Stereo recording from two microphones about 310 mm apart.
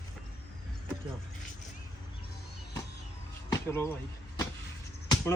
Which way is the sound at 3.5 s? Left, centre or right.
Centre.